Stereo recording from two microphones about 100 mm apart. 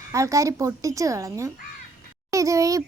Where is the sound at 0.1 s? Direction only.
30° right (ahead or behind).